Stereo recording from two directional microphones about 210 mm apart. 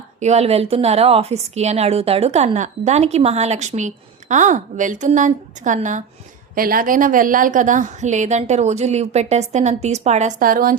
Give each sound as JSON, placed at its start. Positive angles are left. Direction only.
{"t": 0.2, "sound": "a woman's voice", "side_deg": -30}